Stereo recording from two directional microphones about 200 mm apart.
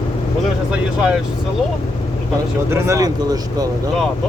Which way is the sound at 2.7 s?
15° right (ahead or behind).